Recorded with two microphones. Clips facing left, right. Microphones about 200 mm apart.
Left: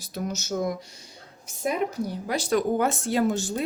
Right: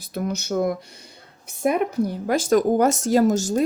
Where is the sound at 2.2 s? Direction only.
50° right (ahead or behind).